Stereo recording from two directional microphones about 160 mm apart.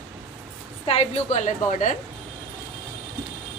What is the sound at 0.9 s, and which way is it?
A woman's voice, 45° left (ahead or behind).